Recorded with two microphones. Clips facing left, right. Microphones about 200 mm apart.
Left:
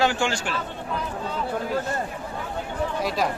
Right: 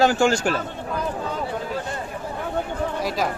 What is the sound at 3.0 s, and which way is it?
Speech, centre (ahead or behind).